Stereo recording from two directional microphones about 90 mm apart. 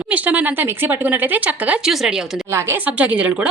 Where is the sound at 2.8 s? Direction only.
15° right (ahead or behind).